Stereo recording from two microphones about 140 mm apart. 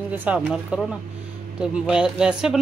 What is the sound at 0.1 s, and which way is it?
Speech, 15° right (ahead or behind).